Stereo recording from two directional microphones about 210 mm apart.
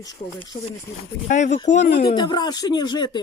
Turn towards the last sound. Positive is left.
turn(degrees=20)  # may be behind; listen again after turning